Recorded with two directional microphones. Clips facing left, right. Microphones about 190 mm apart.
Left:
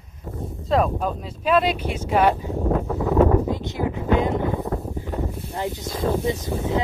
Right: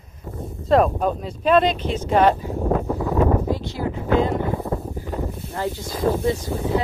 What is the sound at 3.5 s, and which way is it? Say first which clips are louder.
Speech: even; 20° left (ahead or behind).